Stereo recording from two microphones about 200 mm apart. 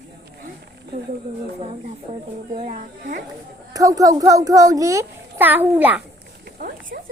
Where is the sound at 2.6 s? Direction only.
40° right (ahead or behind).